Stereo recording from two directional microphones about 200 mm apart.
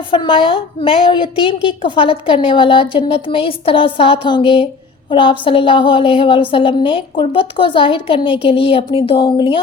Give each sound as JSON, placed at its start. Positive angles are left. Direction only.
{"t": 0.1, "sound": "a woman's voice", "side_deg": 25}